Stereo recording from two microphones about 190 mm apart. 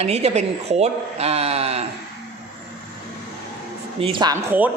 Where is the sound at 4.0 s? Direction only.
25° right (ahead or behind).